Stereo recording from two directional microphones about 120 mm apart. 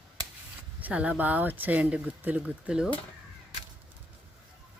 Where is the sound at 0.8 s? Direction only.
10° right (ahead or behind).